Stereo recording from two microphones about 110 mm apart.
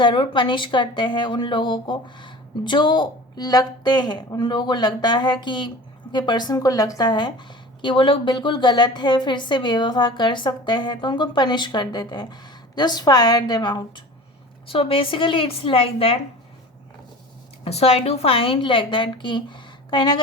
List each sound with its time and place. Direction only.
0.0 s speech: 45° left (ahead or behind)
14.7 s speech: 55° left (ahead or behind)
17.6 s speech: 65° left (ahead or behind); by 20.2 s 45° left (ahead or behind)